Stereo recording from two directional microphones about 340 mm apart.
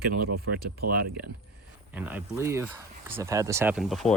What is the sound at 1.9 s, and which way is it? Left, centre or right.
Speech, centre.